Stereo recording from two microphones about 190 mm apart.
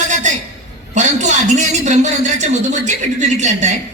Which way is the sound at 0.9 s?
40° right (ahead or behind).